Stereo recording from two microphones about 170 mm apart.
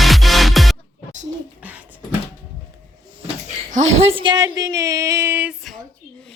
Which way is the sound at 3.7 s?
40° right (ahead or behind).